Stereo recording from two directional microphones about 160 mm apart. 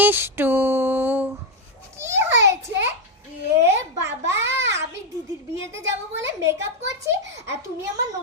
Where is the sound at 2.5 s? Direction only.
90° right.